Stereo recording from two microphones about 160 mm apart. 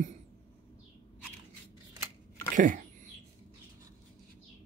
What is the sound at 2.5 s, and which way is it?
Speech, 55° right (ahead or behind).